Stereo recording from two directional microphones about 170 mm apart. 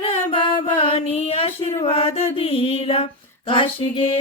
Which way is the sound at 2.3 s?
35° left (ahead or behind).